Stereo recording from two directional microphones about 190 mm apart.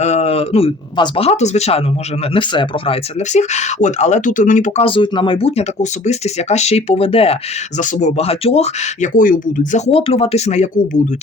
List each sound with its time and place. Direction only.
0.0 s speech: 35° left (ahead or behind)
4.9 s speech: 25° left (ahead or behind)